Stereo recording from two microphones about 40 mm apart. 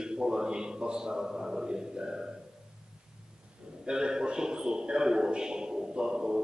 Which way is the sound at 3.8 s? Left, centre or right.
Right.